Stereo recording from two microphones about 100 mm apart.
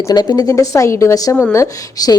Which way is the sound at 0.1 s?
40° left (ahead or behind).